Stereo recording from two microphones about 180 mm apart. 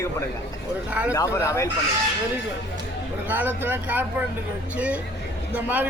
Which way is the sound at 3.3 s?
10° right (ahead or behind).